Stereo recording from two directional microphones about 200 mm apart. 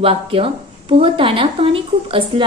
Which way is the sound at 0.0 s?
30° right (ahead or behind).